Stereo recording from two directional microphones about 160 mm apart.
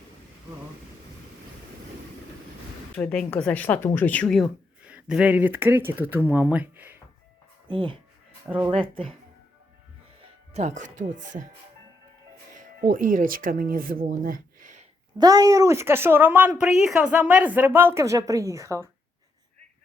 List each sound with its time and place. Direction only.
2.9 s speech: 5° left (ahead or behind)
4.9 s speech: 5° right (ahead or behind)
7.7 s speech: 30° right (ahead or behind)
8.4 s speech: 10° right (ahead or behind)
8.7 s speech: 35° right (ahead or behind)
10.5 s speech: 45° right (ahead or behind)
12.5 s speech: 60° right (ahead or behind)
15.2 s speech: 25° right (ahead or behind)